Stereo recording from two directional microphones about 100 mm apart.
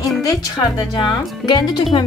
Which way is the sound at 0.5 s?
45° left (ahead or behind).